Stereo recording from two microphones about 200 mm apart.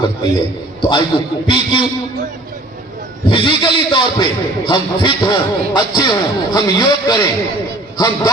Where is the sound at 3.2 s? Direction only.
25° left (ahead or behind).